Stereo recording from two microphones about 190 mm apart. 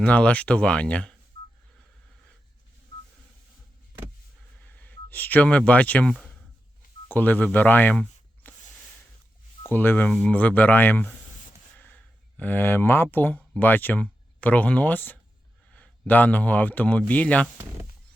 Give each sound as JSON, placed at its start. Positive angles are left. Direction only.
{"t": 0.0, "sound": "speech", "side_deg": 5}
{"t": 4.6, "sound": "speech", "side_deg": 10}
{"t": 8.4, "sound": "a sound", "side_deg": 10}
{"t": 9.6, "sound": "speech", "side_deg": 10}
{"t": 12.4, "sound": "speech", "side_deg": 10}